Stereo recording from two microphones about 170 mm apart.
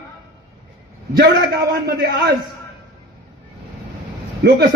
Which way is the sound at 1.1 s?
65° right (ahead or behind).